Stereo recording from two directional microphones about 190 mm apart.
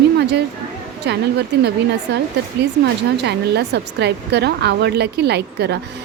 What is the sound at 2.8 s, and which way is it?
Speech, 60° right (ahead or behind).